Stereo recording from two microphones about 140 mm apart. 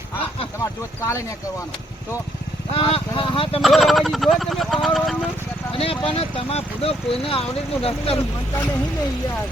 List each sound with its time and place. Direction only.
0.6 s speech: 20° left (ahead or behind)
2.7 s speech: 40° left (ahead or behind)
3.6 s speech: centre (ahead or behind)
5.7 s speech: 40° left (ahead or behind)